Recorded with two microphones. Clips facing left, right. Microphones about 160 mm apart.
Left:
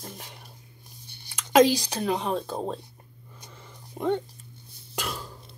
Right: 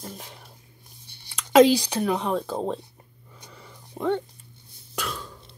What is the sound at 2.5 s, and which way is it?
Speech, 25° right (ahead or behind).